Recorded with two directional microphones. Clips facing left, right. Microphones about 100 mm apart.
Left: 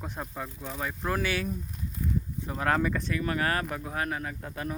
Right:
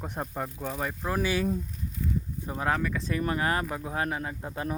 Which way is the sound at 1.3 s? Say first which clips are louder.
Right 4 dB; 30° right (ahead or behind).